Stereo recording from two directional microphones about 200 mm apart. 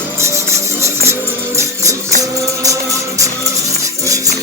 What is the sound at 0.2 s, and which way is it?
Music, 15° right (ahead or behind).